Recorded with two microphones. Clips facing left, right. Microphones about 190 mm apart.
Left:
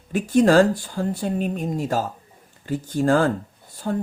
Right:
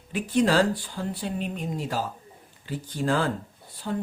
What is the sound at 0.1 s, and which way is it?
A woman's voice, 45° left (ahead or behind).